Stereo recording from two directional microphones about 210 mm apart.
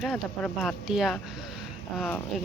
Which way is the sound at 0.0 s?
Centre (ahead or behind).